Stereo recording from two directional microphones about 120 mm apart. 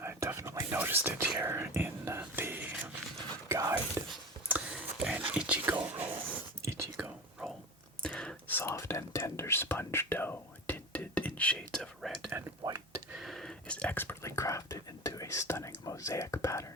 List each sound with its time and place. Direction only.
0.0 s whispering: 20° right (ahead or behind)
3.5 s speech: 25° right (ahead or behind)
4.0 s a sound: 20° right (ahead or behind)
4.4 s whispering: 10° right (ahead or behind)
8.0 s whispering: 5° left (ahead or behind)
12.6 s a sound: 30° right (ahead or behind)
13.1 s whispering: centre (ahead or behind); by 16.6 s 25° left (ahead or behind)